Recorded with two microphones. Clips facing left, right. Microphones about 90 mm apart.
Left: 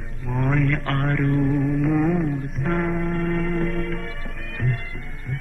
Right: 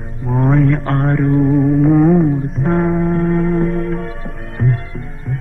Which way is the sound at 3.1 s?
25° right (ahead or behind).